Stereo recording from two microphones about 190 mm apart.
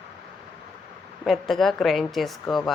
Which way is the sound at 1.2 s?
Centre (ahead or behind).